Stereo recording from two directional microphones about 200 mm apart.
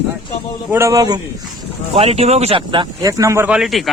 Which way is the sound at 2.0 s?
30° right (ahead or behind).